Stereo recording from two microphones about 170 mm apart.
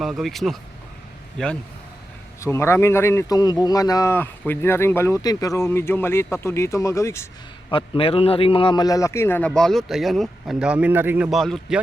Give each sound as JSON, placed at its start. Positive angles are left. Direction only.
{"t": 0.0, "sound": "speech", "side_deg": 0}
{"t": 2.4, "sound": "speech", "side_deg": 15}
{"t": 7.7, "sound": "a man's voice", "side_deg": 30}
{"t": 9.5, "sound": "speech", "side_deg": 0}
{"t": 11.3, "sound": "speech", "side_deg": 0}